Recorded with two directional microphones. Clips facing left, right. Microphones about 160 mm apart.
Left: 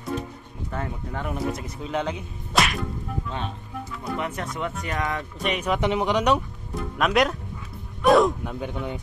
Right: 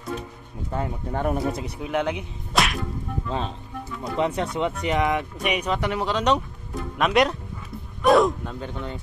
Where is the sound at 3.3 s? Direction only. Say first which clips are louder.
Right 3 dB; 35° right (ahead or behind); by 5.6 s 10° right (ahead or behind).